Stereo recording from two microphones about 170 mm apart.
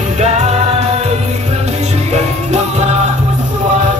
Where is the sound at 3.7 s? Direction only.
45° right (ahead or behind).